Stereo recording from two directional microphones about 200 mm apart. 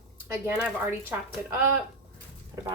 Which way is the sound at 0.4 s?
10° right (ahead or behind).